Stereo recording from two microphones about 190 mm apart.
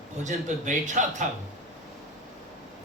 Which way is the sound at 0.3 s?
40° right (ahead or behind).